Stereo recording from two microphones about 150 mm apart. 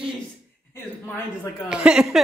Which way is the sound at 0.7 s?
15° left (ahead or behind).